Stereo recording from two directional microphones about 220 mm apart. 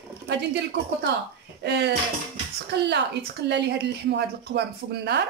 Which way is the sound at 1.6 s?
50° right (ahead or behind).